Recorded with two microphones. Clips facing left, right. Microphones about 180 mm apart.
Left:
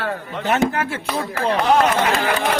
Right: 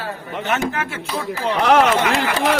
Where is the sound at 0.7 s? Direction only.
35° left (ahead or behind).